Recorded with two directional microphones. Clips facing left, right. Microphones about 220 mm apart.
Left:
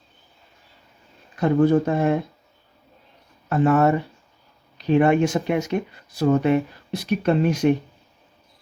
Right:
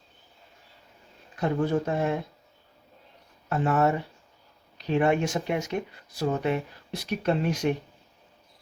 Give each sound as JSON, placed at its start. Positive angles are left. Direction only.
{"t": 1.4, "sound": "speech", "side_deg": 65}
{"t": 3.5, "sound": "speech", "side_deg": 65}